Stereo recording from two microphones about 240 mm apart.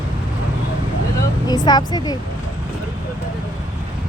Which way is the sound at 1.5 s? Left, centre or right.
Centre.